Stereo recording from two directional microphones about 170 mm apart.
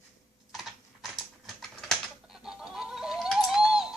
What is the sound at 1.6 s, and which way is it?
Typing, centre (ahead or behind).